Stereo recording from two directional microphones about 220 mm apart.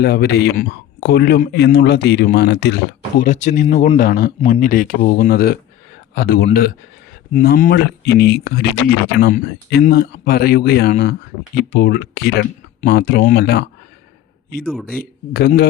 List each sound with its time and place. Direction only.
0.0 s speech: 45° left (ahead or behind)
14.8 s speech: 40° left (ahead or behind)